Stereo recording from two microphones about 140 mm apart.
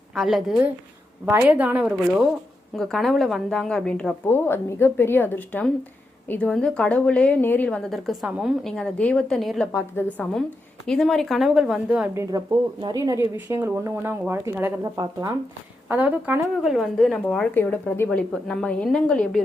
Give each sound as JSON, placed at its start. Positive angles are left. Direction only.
{"t": 0.1, "sound": "a woman's voice", "side_deg": 0}
{"t": 4.3, "sound": "a woman's voice", "side_deg": 15}
{"t": 7.9, "sound": "a woman's voice", "side_deg": 0}
{"t": 9.7, "sound": "a woman's voice", "side_deg": 15}
{"t": 10.8, "sound": "a woman's voice", "side_deg": 5}
{"t": 12.1, "sound": "speech", "side_deg": -20}
{"t": 15.9, "sound": "a woman's voice", "side_deg": -10}
{"t": 16.7, "sound": "a woman's voice", "side_deg": 0}